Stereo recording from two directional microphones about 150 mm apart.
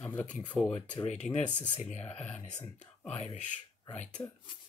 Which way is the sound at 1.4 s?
50° left (ahead or behind).